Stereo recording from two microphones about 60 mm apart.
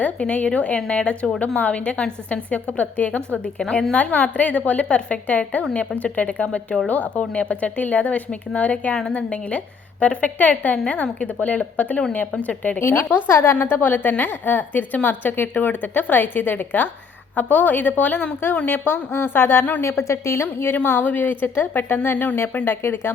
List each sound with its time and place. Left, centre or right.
0.0 s a woman's voice: left
12.8 s a woman's voice: left
18.4 s a woman's voice: left
19.8 s a woman's voice: left
20.7 s a woman's voice: left